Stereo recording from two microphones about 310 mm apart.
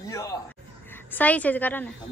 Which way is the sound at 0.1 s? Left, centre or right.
Centre.